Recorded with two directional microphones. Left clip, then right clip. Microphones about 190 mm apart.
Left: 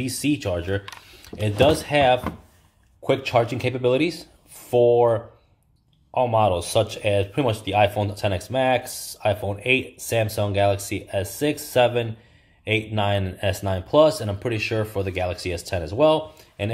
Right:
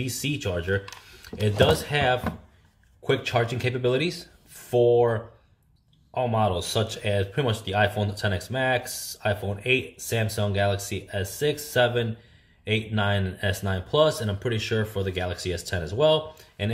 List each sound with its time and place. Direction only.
0.0 s speech: 30° left (ahead or behind)